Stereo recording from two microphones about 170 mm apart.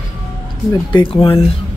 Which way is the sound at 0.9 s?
30° left (ahead or behind).